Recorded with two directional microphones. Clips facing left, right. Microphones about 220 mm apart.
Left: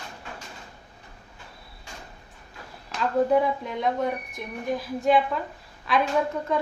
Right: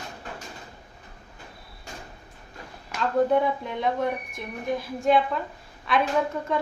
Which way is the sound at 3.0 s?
Centre (ahead or behind).